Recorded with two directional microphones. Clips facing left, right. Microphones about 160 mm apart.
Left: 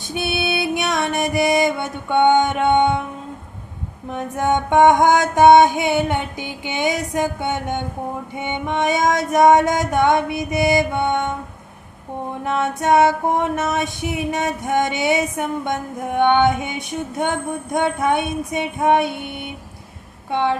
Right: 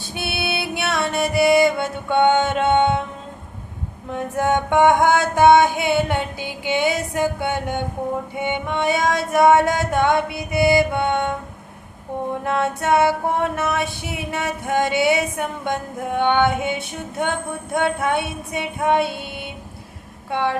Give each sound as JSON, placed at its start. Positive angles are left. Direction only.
{"t": 0.1, "sound": "music", "side_deg": 20}
{"t": 4.1, "sound": "female singing", "side_deg": 20}
{"t": 12.5, "sound": "female singing", "side_deg": 20}